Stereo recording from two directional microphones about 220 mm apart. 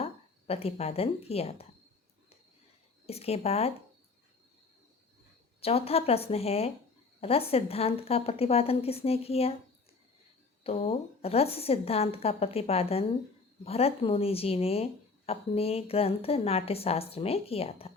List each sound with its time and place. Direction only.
0.0 s a woman's voice: 25° left (ahead or behind)
3.1 s a woman's voice: 30° left (ahead or behind)
5.5 s a woman's voice: 25° left (ahead or behind)
10.6 s a woman's voice: 30° left (ahead or behind)